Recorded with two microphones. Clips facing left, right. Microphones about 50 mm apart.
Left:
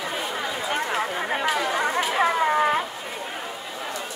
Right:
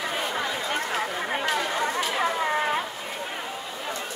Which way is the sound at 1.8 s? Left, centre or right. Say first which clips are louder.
Left 3 dB; left.